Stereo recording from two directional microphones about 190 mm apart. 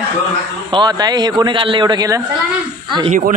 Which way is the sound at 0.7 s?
25° right (ahead or behind).